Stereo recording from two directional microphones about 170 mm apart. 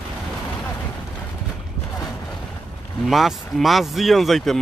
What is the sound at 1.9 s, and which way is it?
Boat, 20° left (ahead or behind).